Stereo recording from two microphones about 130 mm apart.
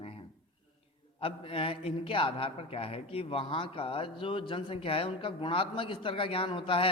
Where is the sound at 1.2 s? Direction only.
45° left (ahead or behind).